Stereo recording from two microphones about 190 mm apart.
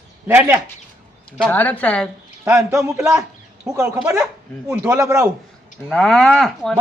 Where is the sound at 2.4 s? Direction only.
10° right (ahead or behind).